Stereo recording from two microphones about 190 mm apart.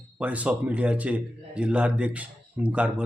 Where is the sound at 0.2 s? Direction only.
5° right (ahead or behind).